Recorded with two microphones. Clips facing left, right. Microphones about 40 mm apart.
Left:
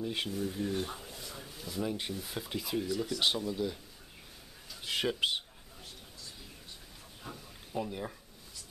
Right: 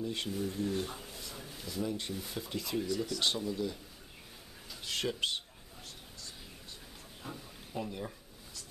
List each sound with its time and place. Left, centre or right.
0.0 s speech: centre
0.3 s speech: centre
0.9 s a sound: centre
1.7 s speech: centre
4.8 s speech: centre
7.2 s a sound: centre